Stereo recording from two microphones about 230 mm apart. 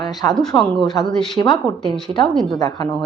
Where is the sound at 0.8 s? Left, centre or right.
Centre.